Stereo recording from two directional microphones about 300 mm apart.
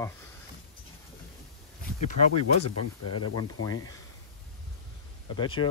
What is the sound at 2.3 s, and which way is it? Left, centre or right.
Speech, left.